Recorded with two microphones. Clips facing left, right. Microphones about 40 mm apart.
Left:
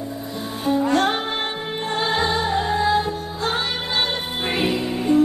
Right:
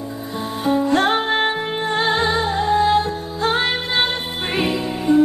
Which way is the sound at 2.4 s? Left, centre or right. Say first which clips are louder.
Right 3 dB; centre.